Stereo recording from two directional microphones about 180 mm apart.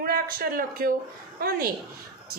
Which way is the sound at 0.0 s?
55° right (ahead or behind).